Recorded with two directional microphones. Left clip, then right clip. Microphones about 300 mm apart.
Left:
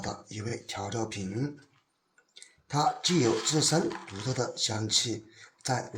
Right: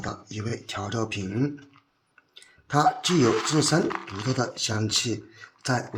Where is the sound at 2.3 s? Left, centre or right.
Centre.